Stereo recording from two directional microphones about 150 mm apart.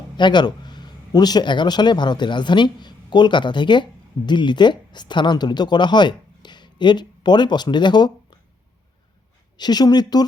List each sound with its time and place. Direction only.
0.2 s speech: 30° left (ahead or behind)
9.6 s speech: 25° left (ahead or behind)